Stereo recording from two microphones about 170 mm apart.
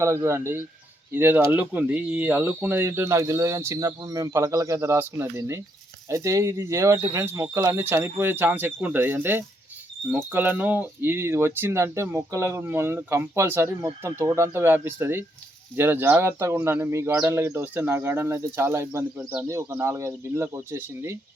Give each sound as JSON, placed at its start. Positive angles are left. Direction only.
{"t": 0.0, "sound": "speech", "side_deg": -15}